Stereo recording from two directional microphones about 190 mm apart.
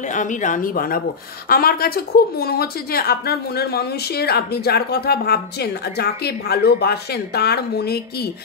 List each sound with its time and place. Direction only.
0.0 s a woman's voice: 40° left (ahead or behind); by 8.3 s 55° left (ahead or behind)